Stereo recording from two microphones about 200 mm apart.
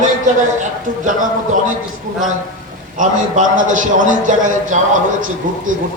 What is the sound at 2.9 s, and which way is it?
A man's voice, 40° right (ahead or behind).